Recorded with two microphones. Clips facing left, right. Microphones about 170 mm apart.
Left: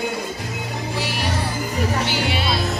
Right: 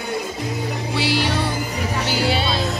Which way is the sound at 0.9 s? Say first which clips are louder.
Right 6 dB; 75° right (ahead or behind).